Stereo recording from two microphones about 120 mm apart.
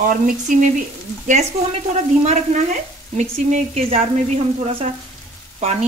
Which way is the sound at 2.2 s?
75° right (ahead or behind).